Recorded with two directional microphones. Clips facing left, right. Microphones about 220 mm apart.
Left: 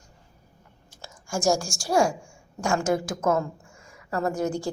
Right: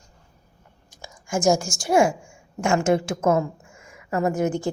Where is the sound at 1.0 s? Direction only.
20° right (ahead or behind).